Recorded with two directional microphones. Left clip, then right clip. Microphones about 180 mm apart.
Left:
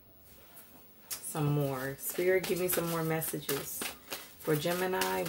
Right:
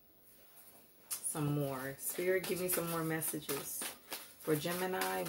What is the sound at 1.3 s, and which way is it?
Speech, 15° left (ahead or behind).